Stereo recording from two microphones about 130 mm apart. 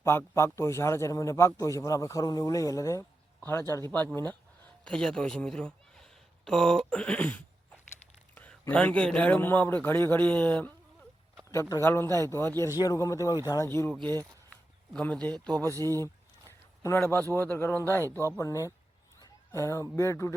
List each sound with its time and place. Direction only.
0.0 s a man's voice: 20° left (ahead or behind)
11.8 s a man's voice: 20° left (ahead or behind)
13.7 s a man's voice: 15° left (ahead or behind)
14.0 s speech: 30° right (ahead or behind)
14.9 s a man's voice: 10° left (ahead or behind)
15.7 s speech: 25° right (ahead or behind)
16.8 s a man's voice: 20° left (ahead or behind)
18.1 s speech: 20° right (ahead or behind)
18.3 s a man's voice: 25° left (ahead or behind)
19.2 s a sound: 25° left (ahead or behind)
20.0 s a man's voice: 20° left (ahead or behind)